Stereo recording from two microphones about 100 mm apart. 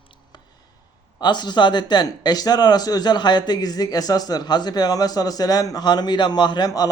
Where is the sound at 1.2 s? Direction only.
45° left (ahead or behind).